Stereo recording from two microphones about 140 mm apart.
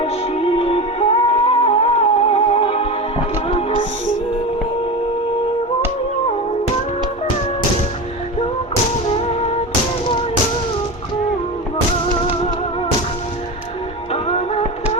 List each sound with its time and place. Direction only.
0.0 s music: 40° left (ahead or behind)